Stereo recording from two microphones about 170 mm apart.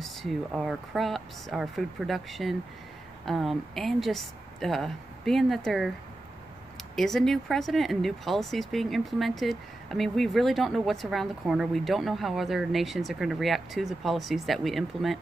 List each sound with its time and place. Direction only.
0.0 s speech: centre (ahead or behind)
7.0 s speech: centre (ahead or behind)